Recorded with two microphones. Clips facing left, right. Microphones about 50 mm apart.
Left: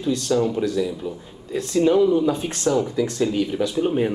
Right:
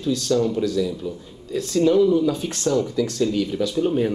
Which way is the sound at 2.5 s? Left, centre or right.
Centre.